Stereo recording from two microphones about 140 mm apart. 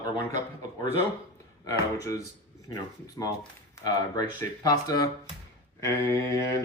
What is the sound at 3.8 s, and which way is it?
Speech, 25° left (ahead or behind).